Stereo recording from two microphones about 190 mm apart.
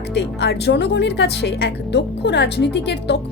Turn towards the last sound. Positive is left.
turn(degrees=60)  # may be behind; listen again after turning